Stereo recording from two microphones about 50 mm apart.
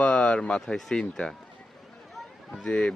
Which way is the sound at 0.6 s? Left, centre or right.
Centre.